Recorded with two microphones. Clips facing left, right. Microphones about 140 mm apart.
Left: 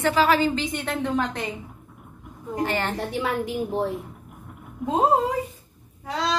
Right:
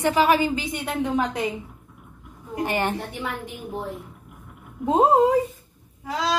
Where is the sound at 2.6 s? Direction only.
15° right (ahead or behind).